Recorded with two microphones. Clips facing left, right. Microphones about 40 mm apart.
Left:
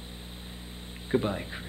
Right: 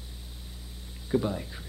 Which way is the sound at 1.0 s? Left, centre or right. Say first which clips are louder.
Even; left.